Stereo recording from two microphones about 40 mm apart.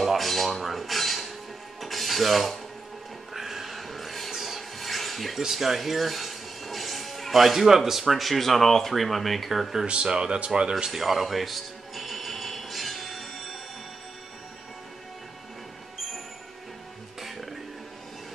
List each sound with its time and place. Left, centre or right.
0.0 s dishes: centre
1.8 s mechanisms: centre
3.3 s rub: centre
5.4 s speech: centre
9.8 s speech: right
10.9 s music: centre
17.2 s music: centre